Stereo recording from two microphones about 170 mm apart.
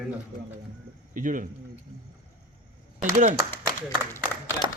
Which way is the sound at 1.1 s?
50° right (ahead or behind).